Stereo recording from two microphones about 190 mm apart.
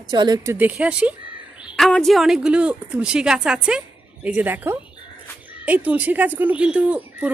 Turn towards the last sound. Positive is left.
turn(degrees=-5)  # may be behind; listen again after turning